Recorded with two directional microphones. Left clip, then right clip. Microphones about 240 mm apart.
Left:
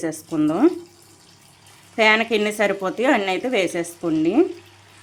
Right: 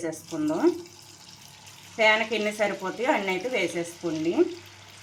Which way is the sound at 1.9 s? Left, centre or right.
Left.